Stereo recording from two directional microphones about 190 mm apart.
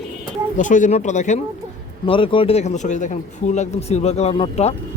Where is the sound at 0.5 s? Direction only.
40° left (ahead or behind).